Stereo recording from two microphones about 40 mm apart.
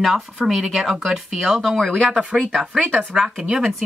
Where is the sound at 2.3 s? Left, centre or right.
Centre.